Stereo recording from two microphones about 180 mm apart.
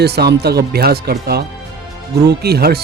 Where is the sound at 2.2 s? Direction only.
60° right (ahead or behind).